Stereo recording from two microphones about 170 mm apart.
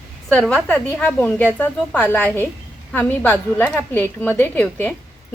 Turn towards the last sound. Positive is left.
turn(degrees=10)  # may be behind; listen again after turning